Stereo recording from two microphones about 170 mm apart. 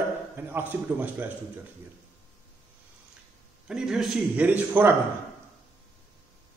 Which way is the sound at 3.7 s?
5° right (ahead or behind).